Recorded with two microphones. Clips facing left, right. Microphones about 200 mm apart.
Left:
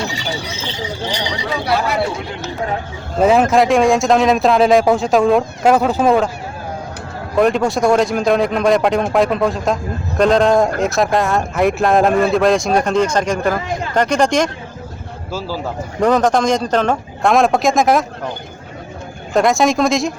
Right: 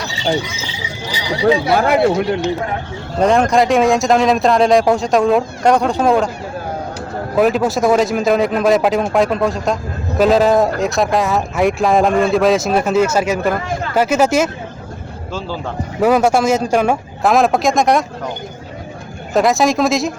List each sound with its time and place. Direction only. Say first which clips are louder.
0.5 s speech: left 3 dB; 10° right (ahead or behind)
1.7 s speech: right 5 dB; 55° right (ahead or behind)
3.2 s speech: left 1 dB; 5° left (ahead or behind)
7.3 s a man's voice: even; 5° right (ahead or behind)
15.3 s speech: left 1 dB; 5° left (ahead or behind)
16.0 s a man's voice: right 1 dB; 10° right (ahead or behind)
19.3 s speech: even; centre (ahead or behind)